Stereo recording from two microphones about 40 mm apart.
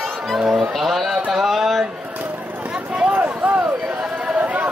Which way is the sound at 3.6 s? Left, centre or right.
Right.